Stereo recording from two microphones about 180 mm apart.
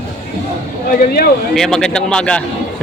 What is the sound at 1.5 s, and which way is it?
Speech, 5° left (ahead or behind).